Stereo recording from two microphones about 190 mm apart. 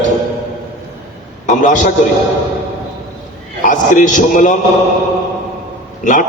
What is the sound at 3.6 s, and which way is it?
Speech, 45° left (ahead or behind).